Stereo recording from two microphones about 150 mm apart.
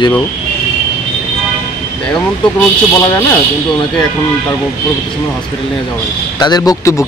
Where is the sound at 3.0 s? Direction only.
15° left (ahead or behind).